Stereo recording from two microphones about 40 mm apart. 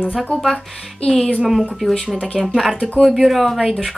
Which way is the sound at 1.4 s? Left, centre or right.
Centre.